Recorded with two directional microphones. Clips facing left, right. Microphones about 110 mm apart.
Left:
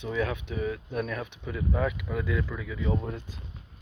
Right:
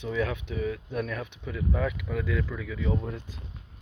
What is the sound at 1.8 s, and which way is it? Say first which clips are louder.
Speech: even; 15° left (ahead or behind).